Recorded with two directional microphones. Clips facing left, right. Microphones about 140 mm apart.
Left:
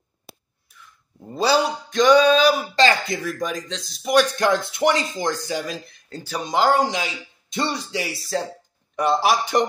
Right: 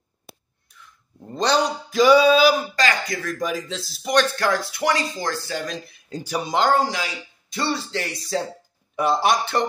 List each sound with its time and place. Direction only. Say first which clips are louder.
0.7 s a sound: even; 5° left (ahead or behind)
2.7 s speech: left 4 dB; 25° left (ahead or behind)
3.3 s a man's voice: right 1 dB; 5° right (ahead or behind)
4.4 s speech: left 3 dB; 20° left (ahead or behind)
6.0 s speech: right 3 dB; 15° right (ahead or behind)
6.7 s a man's voice: left 1 dB; 20° left (ahead or behind); by 9.4 s centre (ahead or behind)
9.4 s speech: left 2 dB; 15° left (ahead or behind)